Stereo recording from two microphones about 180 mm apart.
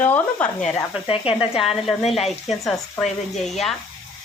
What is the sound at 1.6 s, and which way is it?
Speech, centre (ahead or behind).